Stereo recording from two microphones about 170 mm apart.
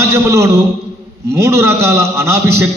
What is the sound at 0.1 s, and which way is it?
A man's voice, 15° right (ahead or behind).